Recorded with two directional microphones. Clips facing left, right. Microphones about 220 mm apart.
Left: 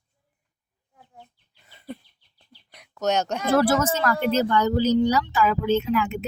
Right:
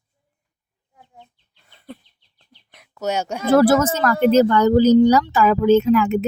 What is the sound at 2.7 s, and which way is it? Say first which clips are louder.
Speech: even; 5° right (ahead or behind).